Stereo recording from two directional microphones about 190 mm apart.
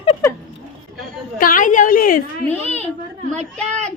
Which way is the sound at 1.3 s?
45° left (ahead or behind).